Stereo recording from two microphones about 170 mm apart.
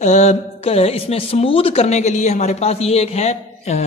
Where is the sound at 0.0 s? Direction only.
45° left (ahead or behind).